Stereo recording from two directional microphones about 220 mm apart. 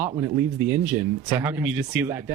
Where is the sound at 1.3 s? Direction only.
10° right (ahead or behind).